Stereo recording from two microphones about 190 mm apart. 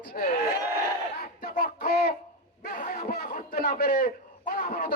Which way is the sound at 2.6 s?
50° left (ahead or behind).